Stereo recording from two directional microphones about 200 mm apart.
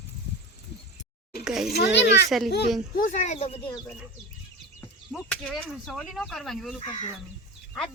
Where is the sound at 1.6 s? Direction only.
55° left (ahead or behind).